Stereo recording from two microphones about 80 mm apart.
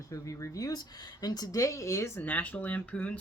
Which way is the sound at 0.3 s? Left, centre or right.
Left.